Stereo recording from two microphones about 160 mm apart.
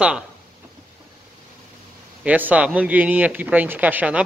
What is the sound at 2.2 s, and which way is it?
Speech, 10° right (ahead or behind).